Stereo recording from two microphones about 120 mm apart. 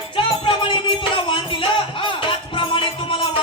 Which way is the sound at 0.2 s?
45° left (ahead or behind).